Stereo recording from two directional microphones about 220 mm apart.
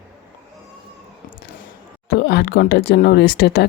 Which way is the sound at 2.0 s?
50° left (ahead or behind).